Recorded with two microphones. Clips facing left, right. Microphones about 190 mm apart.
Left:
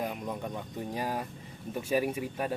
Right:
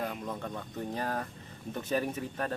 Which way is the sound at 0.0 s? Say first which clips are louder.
Left 1 dB; 15° left (ahead or behind).